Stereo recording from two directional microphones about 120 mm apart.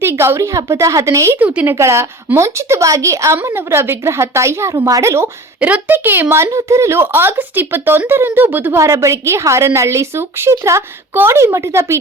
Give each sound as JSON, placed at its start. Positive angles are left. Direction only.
{"t": 0.0, "sound": "speech", "side_deg": -20}
{"t": 1.4, "sound": "a woman's voice", "side_deg": -10}
{"t": 1.7, "sound": "speech", "side_deg": -25}
{"t": 5.5, "sound": "a woman's voice", "side_deg": -10}